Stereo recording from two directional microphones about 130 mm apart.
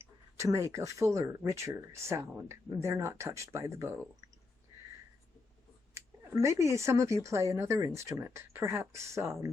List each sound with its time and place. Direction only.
0.0 s speech: 25° right (ahead or behind)
5.9 s speech: 20° right (ahead or behind)